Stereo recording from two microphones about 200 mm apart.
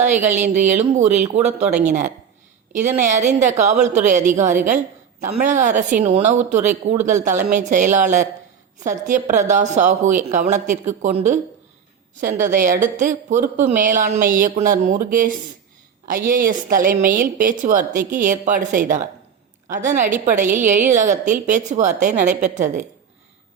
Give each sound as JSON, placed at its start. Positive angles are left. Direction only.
{"t": 0.0, "sound": "speech", "side_deg": -35}